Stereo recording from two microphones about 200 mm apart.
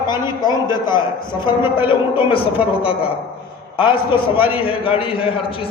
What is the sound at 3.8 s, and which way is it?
A man's voice, 25° left (ahead or behind).